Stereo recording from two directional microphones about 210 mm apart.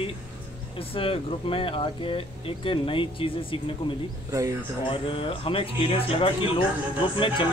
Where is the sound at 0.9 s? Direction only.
25° left (ahead or behind).